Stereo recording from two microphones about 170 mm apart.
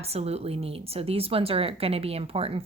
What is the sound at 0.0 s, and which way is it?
Speech, 35° right (ahead or behind).